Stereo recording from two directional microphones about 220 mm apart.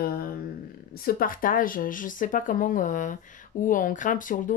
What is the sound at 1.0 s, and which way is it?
Speech, 40° left (ahead or behind).